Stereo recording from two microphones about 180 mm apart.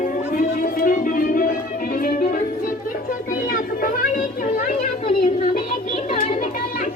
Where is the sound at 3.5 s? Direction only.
50° left (ahead or behind).